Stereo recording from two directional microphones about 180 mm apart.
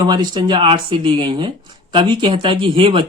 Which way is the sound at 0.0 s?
25° right (ahead or behind).